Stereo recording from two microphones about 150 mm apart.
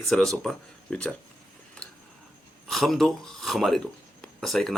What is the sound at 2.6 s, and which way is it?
Speech, centre (ahead or behind).